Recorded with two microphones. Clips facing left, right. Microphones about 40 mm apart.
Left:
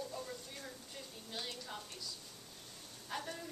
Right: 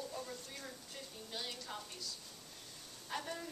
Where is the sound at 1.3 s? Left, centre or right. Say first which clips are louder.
Even; centre.